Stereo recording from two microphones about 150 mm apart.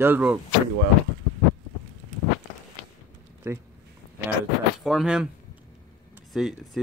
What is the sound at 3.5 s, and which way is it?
Speech, 15° right (ahead or behind).